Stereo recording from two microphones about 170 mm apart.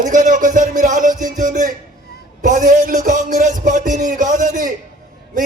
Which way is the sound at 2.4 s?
50° right (ahead or behind).